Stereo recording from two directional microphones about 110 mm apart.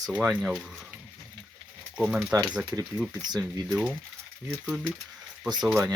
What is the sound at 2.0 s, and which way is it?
Speech, 10° right (ahead or behind).